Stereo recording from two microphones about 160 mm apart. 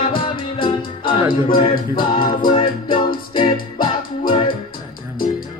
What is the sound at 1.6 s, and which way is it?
A capella, 30° left (ahead or behind).